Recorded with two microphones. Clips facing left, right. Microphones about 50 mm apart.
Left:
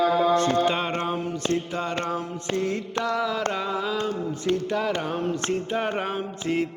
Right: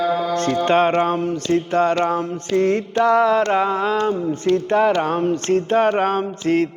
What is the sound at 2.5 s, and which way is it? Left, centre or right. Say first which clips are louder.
Mantra: right 8 dB; right.